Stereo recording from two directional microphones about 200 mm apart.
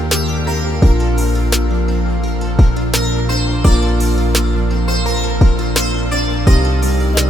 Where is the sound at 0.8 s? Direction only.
Centre (ahead or behind).